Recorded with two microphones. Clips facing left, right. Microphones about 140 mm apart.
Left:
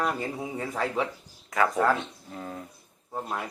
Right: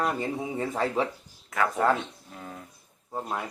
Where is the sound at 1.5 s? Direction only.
Centre (ahead or behind).